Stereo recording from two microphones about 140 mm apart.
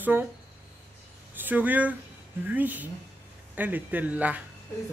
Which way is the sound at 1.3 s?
15° right (ahead or behind).